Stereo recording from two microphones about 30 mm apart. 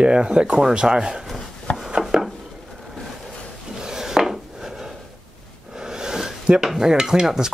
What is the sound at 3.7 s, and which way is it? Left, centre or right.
Dishes, centre.